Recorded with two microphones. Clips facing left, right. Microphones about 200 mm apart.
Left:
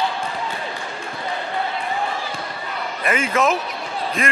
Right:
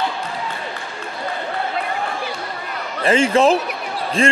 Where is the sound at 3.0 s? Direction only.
30° right (ahead or behind).